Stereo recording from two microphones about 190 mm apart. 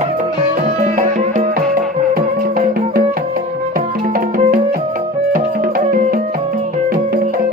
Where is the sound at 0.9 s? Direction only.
40° right (ahead or behind).